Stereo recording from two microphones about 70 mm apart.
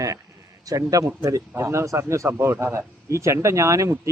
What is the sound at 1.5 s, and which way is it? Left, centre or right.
Speech, right.